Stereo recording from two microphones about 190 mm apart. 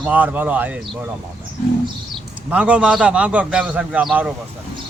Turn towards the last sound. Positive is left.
turn(degrees=-5)  # may be behind; listen again after turning